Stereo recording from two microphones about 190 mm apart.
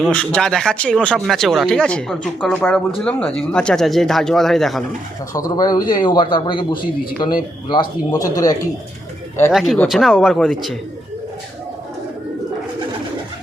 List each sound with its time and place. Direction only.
0.0 s speech: 5° left (ahead or behind)
5.3 s a man's voice: 20° left (ahead or behind)
9.5 s speech: centre (ahead or behind)